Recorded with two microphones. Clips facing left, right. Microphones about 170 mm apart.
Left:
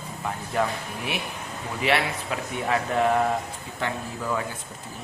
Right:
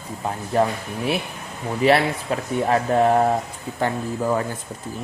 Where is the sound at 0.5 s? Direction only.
35° right (ahead or behind).